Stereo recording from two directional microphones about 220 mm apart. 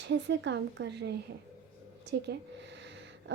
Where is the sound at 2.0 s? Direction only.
50° right (ahead or behind).